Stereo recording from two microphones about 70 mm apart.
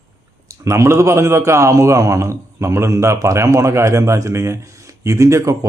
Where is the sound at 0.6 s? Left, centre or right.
Right.